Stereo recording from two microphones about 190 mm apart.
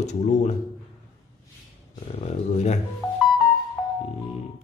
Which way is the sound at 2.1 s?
35° left (ahead or behind).